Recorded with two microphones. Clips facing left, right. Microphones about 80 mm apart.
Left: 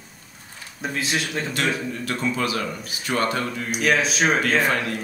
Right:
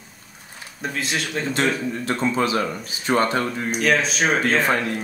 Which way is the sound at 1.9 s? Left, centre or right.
Right.